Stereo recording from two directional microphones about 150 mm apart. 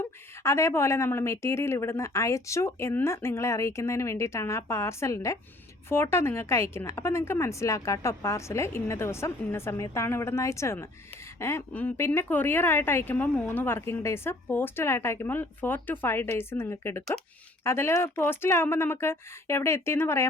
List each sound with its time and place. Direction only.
0.0 s a woman's voice: 20° left (ahead or behind)